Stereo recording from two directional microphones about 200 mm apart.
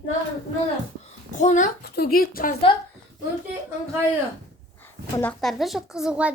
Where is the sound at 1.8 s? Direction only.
50° left (ahead or behind).